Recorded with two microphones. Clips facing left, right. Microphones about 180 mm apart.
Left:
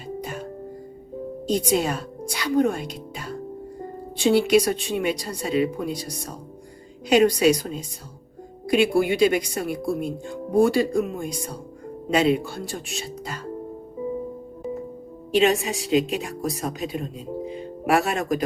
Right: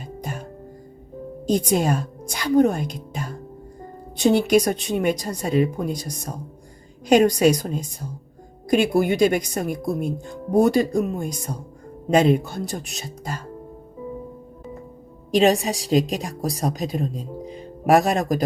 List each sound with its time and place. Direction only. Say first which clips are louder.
1.5 s a woman's voice: right 2 dB; 45° right (ahead or behind)
7.1 s a woman's voice: right 2 dB; 45° right (ahead or behind)
8.7 s a woman's voice: right 1 dB; 45° right (ahead or behind)
15.4 s speech: right 2 dB; 35° right (ahead or behind)